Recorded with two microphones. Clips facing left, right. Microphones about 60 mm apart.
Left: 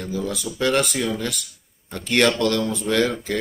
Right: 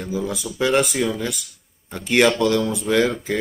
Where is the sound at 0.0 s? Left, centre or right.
Centre.